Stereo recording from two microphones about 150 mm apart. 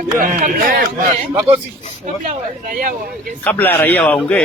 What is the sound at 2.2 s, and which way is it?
Speech, 65° right (ahead or behind).